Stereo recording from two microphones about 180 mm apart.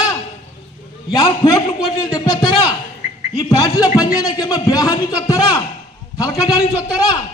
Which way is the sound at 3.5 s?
20° left (ahead or behind).